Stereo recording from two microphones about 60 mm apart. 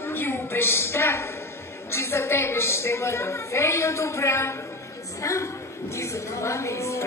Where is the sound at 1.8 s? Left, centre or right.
Left.